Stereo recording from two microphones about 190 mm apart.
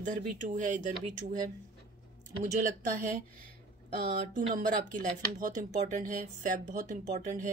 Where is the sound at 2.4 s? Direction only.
40° right (ahead or behind).